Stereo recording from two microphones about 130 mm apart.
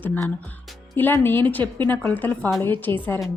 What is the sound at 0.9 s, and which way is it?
Speech, 15° left (ahead or behind).